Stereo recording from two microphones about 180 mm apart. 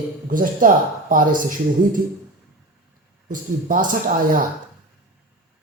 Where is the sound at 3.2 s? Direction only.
50° right (ahead or behind).